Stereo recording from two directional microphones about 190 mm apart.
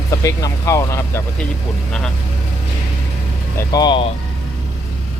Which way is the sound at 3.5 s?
20° left (ahead or behind).